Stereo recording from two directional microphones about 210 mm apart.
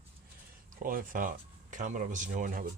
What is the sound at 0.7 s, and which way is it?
Speech, 40° right (ahead or behind).